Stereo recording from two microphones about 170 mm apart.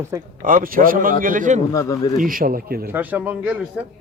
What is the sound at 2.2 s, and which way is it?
Speech, 55° right (ahead or behind).